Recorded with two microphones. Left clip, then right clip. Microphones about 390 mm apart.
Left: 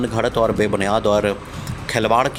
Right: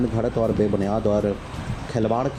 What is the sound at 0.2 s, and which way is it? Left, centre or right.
Speech, left.